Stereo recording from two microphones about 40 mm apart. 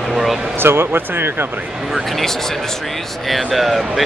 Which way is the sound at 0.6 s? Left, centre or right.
Right.